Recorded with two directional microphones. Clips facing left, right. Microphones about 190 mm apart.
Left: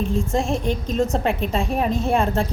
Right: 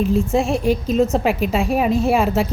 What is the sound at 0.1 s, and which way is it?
A woman's voice, 5° right (ahead or behind).